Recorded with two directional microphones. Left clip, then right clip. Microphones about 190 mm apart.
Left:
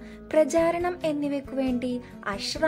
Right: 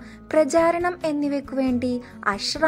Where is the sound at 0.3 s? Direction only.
20° right (ahead or behind).